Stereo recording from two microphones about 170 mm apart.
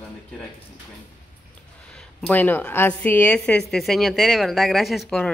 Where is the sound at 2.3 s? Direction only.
10° left (ahead or behind).